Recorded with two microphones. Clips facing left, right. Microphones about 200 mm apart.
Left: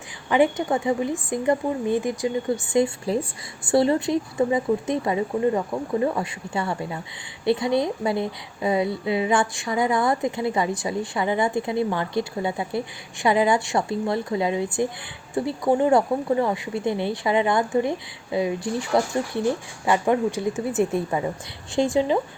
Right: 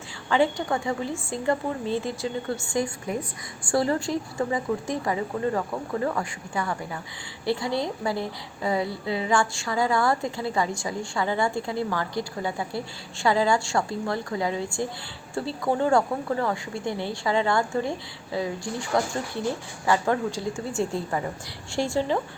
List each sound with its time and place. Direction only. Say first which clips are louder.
0.3 s a woman's voice: left 3 dB; 20° left (ahead or behind)